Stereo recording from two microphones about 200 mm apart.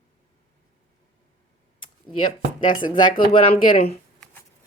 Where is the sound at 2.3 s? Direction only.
25° left (ahead or behind).